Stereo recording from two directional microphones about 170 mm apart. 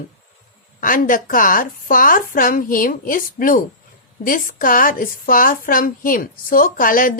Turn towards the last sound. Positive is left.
turn(degrees=55)  # may be behind; listen again after turning